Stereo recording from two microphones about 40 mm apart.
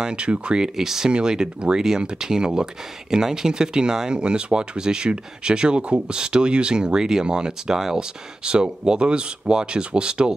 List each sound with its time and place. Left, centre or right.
0.0 s speech: right
0.7 s speech: centre